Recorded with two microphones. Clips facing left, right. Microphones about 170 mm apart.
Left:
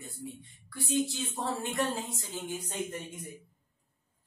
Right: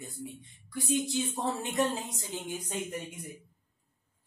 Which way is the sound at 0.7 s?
20° right (ahead or behind).